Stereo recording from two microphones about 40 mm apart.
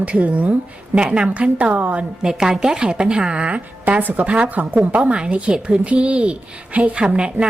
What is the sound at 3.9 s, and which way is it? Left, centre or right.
A woman's voice, right.